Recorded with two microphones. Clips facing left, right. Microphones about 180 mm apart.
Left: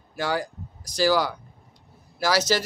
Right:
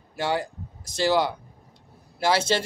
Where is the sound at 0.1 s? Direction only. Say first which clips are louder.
Even; 25° right (ahead or behind).